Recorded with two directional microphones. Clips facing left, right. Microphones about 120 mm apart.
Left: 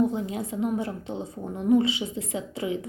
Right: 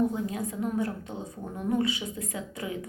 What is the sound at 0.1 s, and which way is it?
A woman's voice, 20° left (ahead or behind).